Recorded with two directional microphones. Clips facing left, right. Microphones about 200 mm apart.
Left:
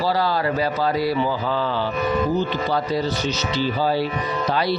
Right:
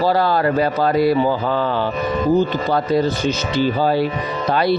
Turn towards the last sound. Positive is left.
turn(degrees=-55)  # may be behind; listen again after turning